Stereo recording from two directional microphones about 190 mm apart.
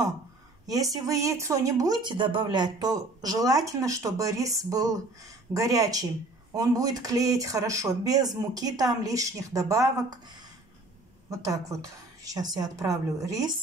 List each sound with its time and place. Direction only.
0.9 s speech: 15° right (ahead or behind)
11.2 s speech: 15° right (ahead or behind)